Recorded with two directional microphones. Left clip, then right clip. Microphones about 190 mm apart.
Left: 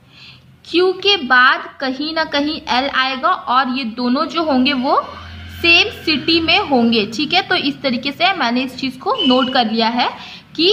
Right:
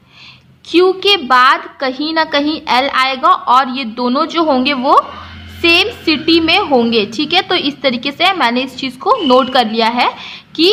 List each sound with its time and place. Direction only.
0.7 s a woman's voice: 30° right (ahead or behind)